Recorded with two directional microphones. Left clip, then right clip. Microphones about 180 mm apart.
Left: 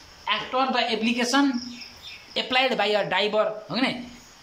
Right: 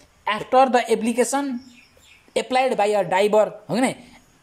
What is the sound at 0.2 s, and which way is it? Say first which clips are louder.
Speech: right 7 dB; 40° right (ahead or behind).